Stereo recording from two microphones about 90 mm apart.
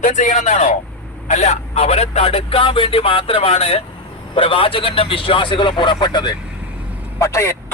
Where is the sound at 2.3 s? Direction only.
90° left; by 6.3 s 55° left (ahead or behind).